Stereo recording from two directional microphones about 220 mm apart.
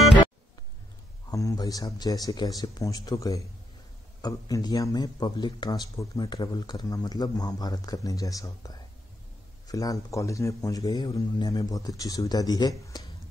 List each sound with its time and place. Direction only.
1.3 s a man's voice: 15° left (ahead or behind)